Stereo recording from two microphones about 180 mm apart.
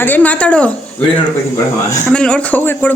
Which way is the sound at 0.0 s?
10° left (ahead or behind).